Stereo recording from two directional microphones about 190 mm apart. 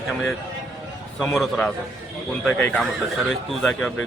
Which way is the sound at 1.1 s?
Centre (ahead or behind).